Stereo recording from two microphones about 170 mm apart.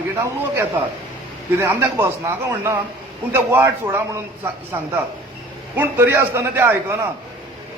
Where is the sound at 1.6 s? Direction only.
15° right (ahead or behind).